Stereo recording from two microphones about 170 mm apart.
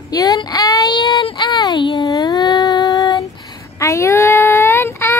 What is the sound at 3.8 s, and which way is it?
Child singing, 15° left (ahead or behind).